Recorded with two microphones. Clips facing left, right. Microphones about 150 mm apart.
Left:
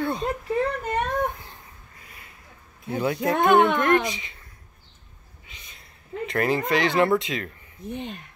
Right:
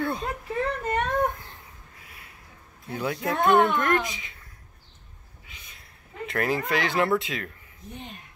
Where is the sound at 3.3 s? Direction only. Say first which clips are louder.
Left 2 dB; 70° left (ahead or behind).